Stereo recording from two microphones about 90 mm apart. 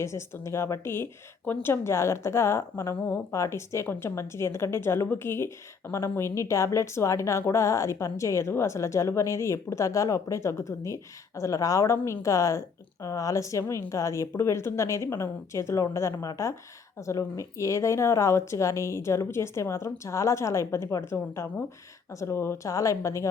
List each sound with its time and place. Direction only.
0.0 s speech: 30° left (ahead or behind)